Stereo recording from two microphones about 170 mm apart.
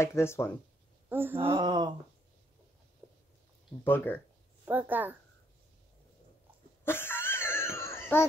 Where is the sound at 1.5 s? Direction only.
25° right (ahead or behind).